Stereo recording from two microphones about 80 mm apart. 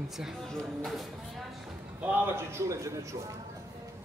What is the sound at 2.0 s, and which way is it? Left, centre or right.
A man's voice, right.